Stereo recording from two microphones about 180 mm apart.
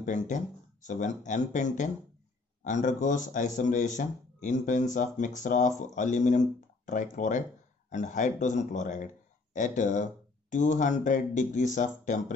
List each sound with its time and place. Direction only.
0.0 s speech: 45° left (ahead or behind)